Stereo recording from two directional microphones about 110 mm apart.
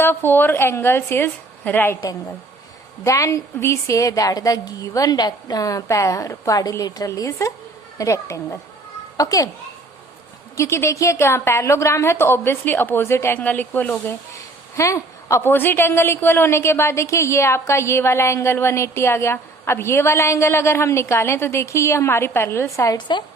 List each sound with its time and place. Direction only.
0.0 s a woman's voice: 20° left (ahead or behind)
10.6 s a woman's voice: 25° left (ahead or behind)
14.8 s a woman's voice: 25° left (ahead or behind)
23.0 s a woman's voice: 45° left (ahead or behind)